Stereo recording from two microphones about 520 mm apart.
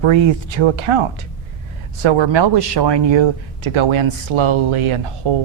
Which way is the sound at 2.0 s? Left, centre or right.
Right.